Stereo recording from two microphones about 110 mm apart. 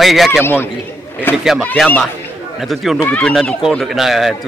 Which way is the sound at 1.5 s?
Centre (ahead or behind).